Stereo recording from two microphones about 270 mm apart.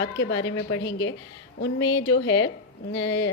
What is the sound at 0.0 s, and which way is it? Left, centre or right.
A woman's voice, left.